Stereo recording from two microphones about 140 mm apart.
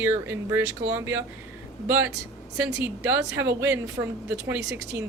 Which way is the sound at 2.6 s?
10° right (ahead or behind).